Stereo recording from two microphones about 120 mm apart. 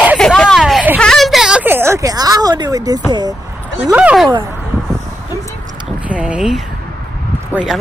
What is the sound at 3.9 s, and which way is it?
Speech, 10° right (ahead or behind).